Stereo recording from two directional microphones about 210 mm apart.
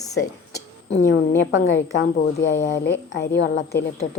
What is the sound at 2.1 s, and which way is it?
A woman's voice, 50° left (ahead or behind).